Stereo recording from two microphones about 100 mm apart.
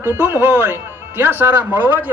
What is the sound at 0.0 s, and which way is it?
Speech, 25° right (ahead or behind).